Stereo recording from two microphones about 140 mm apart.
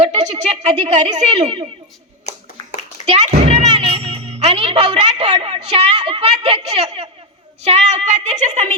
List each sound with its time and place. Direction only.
0.0 s a sound: 50° right (ahead or behind)
0.6 s a woman's voice: 50° right (ahead or behind)
3.1 s a child's voice: 55° right (ahead or behind)